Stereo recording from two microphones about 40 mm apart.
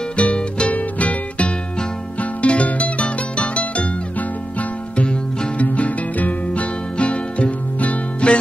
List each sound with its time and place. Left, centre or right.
0.2 s music: left